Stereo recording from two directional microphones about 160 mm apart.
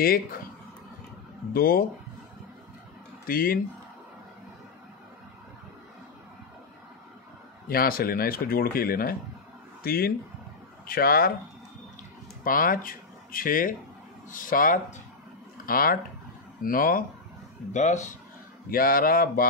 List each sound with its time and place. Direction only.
0.0 s speech: 65° left (ahead or behind)
1.5 s speech: 65° left (ahead or behind)
3.3 s speech: 65° left (ahead or behind)
7.6 s speech: 65° left (ahead or behind)
12.4 s speech: 60° left (ahead or behind)
17.7 s speech: 50° left (ahead or behind)
18.7 s speech: 65° left (ahead or behind)